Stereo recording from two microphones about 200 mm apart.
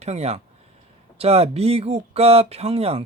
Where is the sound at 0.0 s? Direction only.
30° right (ahead or behind).